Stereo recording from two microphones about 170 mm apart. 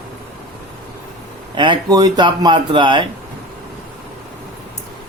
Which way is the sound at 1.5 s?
30° right (ahead or behind).